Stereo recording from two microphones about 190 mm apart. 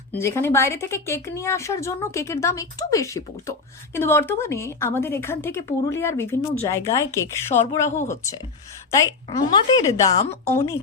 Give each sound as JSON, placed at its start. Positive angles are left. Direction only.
{"t": 0.2, "sound": "a woman's voice", "side_deg": 15}